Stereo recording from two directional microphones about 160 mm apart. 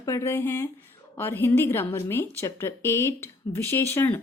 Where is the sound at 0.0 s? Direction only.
15° left (ahead or behind).